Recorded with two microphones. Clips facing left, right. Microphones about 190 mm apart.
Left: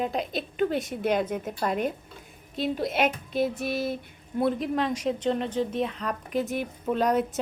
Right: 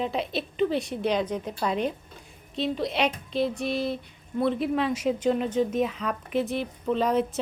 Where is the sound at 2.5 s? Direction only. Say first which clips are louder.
Even; 5° left (ahead or behind).